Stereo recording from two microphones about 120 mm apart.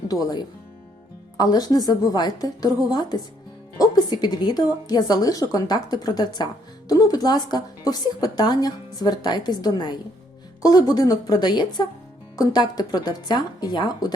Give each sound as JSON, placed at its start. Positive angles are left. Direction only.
{"t": 0.1, "sound": "a woman's voice", "side_deg": 35}